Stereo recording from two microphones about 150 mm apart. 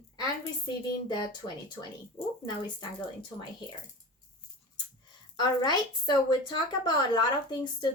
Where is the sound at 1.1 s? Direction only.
30° left (ahead or behind).